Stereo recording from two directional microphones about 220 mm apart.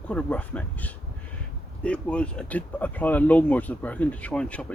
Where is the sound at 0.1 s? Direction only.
5° left (ahead or behind).